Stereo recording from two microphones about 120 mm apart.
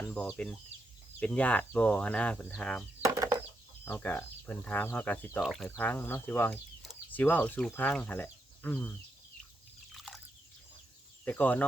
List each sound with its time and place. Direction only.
0.0 s chicken: 15° left (ahead or behind)
1.2 s speech: 10° left (ahead or behind)
3.0 s a sound: 25° right (ahead or behind)
3.8 s speech: 20° left (ahead or behind)
5.4 s speech: centre (ahead or behind)
5.6 s speech: 15° left (ahead or behind)
11.3 s speech: 15° left (ahead or behind)